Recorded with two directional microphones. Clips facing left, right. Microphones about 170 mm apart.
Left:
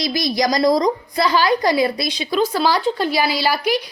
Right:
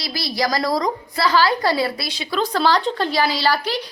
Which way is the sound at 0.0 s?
20° left (ahead or behind).